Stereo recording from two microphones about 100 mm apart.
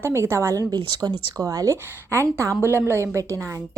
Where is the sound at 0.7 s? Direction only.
45° right (ahead or behind).